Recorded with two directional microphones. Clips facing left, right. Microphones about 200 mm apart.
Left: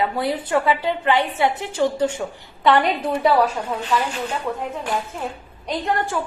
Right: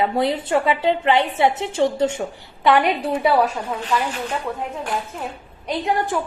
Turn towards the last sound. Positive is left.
turn(degrees=-15)  # may be behind; listen again after turning